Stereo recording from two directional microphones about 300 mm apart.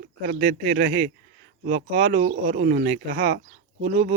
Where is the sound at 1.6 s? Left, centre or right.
Right.